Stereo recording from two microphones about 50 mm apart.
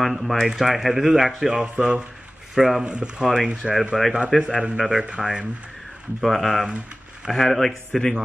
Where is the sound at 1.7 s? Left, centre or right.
Right.